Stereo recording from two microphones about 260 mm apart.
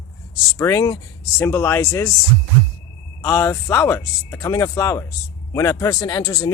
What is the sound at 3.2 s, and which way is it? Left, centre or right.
Speech, centre.